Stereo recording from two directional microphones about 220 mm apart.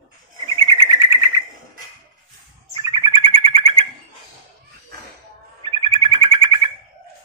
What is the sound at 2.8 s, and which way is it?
Bird, 20° right (ahead or behind).